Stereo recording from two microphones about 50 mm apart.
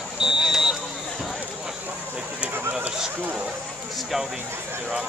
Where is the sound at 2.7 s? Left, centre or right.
Right.